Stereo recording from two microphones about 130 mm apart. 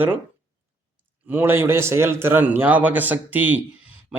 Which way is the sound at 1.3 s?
15° right (ahead or behind).